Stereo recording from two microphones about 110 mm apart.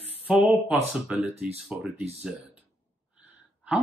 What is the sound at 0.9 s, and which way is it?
Speech, 10° right (ahead or behind).